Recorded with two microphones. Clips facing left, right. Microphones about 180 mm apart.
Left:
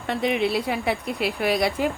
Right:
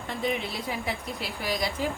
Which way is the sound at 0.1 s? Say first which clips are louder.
Left 8 dB; 70° left (ahead or behind).